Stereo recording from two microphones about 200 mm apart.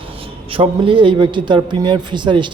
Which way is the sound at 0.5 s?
25° right (ahead or behind).